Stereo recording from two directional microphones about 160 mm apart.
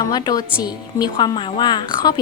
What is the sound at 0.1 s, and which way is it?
Speech, 25° left (ahead or behind).